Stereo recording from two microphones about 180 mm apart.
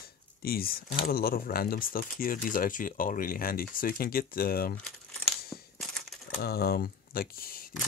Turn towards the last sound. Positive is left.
turn(degrees=55)  # may be behind; listen again after turning